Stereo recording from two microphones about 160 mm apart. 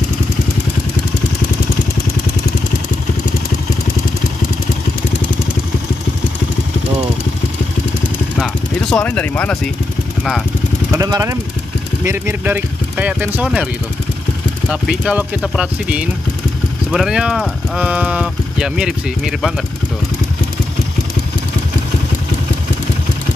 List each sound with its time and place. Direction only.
8.9 s speech: 10° left (ahead or behind)
10.9 s speech: 20° right (ahead or behind)
14.7 s speech: 5° right (ahead or behind)